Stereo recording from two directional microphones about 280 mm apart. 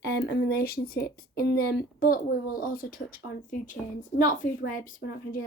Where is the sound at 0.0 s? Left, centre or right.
Left.